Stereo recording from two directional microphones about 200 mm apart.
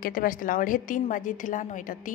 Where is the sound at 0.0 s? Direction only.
45° left (ahead or behind).